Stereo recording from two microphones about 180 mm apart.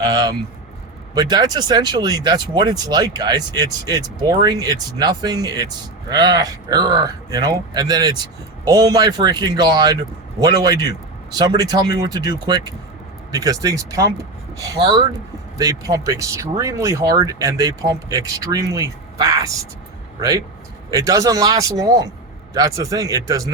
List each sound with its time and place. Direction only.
0.1 s speech: 20° right (ahead or behind)
20.9 s speech: 20° right (ahead or behind)